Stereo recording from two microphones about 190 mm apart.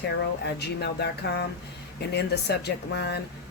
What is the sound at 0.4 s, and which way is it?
Speech, 60° left (ahead or behind).